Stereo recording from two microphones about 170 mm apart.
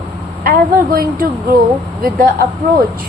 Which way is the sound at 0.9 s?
60° right (ahead or behind).